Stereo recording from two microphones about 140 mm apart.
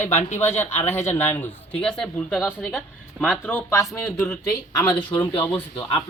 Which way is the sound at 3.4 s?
20° left (ahead or behind).